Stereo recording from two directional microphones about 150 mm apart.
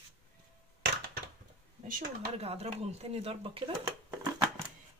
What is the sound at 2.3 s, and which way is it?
Speech, 40° right (ahead or behind).